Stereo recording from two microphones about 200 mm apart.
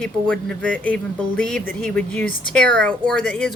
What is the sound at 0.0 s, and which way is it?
Speech, 5° left (ahead or behind).